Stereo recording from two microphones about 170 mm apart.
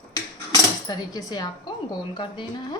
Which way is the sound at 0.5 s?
25° left (ahead or behind).